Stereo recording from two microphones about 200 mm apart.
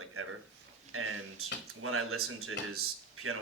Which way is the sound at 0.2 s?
90° right.